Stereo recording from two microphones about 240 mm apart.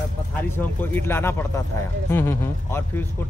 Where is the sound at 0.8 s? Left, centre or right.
Centre.